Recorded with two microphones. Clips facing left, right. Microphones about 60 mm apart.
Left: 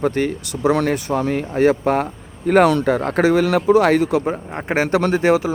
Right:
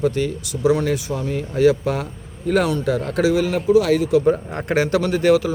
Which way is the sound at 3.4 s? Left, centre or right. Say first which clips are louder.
Left 2 dB; left.